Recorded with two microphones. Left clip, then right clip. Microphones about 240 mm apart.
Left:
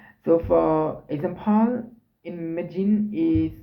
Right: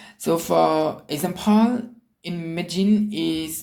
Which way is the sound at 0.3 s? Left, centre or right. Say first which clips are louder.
Even; right.